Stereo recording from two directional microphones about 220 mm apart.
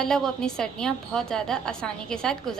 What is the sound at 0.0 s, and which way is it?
A woman's voice, 5° left (ahead or behind).